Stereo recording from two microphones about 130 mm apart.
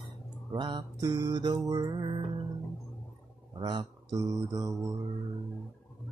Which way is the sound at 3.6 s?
35° right (ahead or behind).